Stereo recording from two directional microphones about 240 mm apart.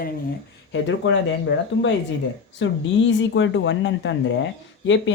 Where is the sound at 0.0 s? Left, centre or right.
Left.